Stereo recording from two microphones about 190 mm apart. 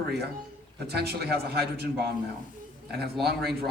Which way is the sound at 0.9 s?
55° right (ahead or behind).